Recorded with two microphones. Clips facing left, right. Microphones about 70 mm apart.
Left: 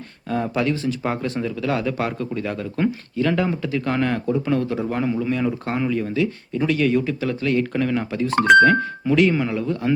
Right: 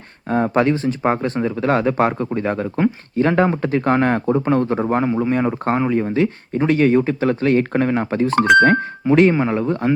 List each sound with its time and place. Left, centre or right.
0.3 s speech: right